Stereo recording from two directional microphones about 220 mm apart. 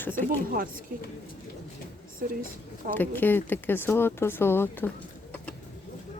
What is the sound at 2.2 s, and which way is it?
Speech, 40° right (ahead or behind).